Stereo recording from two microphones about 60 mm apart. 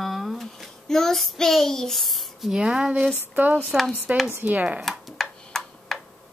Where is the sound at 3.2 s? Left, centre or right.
Right.